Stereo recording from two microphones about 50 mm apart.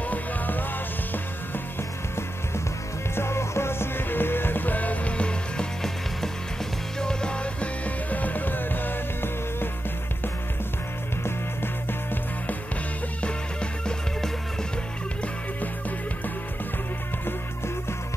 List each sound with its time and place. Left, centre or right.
0.1 s music: left
3.2 s music: left
7.0 s music: centre; by 9.7 s left
11.2 s music: left
13.2 s music: left